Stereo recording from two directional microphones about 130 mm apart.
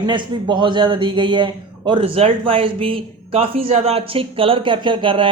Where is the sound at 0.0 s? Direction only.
35° right (ahead or behind).